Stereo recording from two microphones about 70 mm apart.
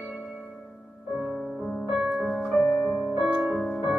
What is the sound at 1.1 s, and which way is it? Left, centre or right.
Music, centre.